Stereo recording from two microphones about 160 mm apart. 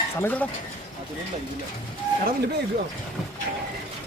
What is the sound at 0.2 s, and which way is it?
Speech, 10° left (ahead or behind).